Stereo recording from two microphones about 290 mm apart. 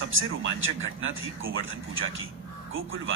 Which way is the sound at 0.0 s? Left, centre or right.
Right.